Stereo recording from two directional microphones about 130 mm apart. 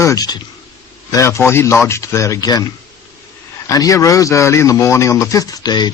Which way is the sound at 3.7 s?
25° left (ahead or behind).